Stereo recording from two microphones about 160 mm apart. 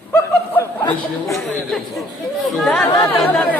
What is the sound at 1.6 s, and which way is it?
A man's voice, 5° left (ahead or behind).